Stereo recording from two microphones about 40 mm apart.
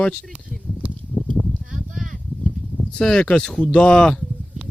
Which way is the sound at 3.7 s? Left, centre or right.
Left.